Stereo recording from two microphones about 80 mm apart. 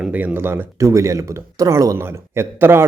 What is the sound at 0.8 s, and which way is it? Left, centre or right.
A man's voice, right.